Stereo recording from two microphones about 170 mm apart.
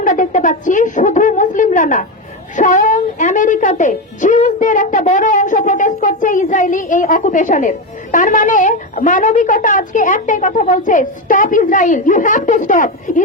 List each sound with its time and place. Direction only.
0.0 s speech: 50° left (ahead or behind)